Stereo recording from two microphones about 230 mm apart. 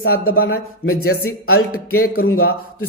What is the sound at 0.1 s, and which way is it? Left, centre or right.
Speech, left.